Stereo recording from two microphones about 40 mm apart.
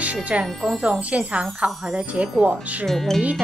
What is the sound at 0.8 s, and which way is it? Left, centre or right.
Speech, right.